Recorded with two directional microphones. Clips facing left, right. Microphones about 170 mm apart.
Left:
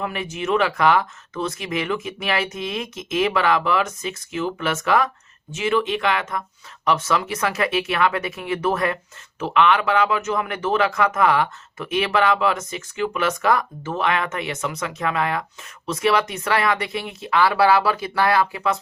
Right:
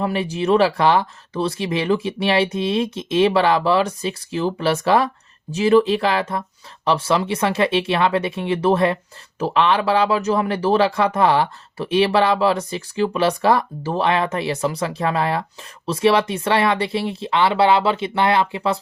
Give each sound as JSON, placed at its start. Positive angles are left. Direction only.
{"t": 0.0, "sound": "speech", "side_deg": -35}